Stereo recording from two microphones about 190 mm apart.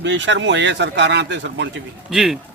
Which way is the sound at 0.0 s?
75° right (ahead or behind).